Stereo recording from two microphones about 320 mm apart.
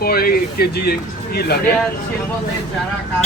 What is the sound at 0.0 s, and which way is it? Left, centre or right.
Speech, left.